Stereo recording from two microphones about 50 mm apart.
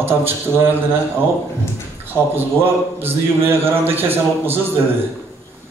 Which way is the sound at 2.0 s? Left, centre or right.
Right.